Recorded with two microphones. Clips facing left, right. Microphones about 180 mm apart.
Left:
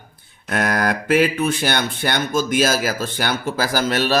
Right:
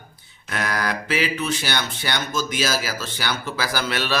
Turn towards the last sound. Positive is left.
turn(degrees=45)  # may be behind; listen again after turning